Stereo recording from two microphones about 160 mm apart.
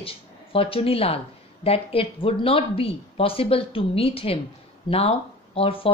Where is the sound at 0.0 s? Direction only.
35° left (ahead or behind).